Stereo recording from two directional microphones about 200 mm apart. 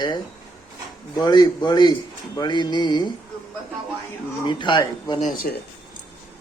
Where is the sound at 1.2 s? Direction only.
20° left (ahead or behind).